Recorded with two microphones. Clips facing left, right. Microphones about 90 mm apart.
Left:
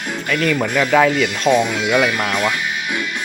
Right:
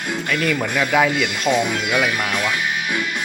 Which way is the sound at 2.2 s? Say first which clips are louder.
Left 2 dB; 20° left (ahead or behind).